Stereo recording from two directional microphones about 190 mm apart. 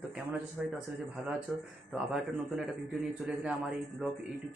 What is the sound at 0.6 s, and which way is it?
Speech, centre (ahead or behind).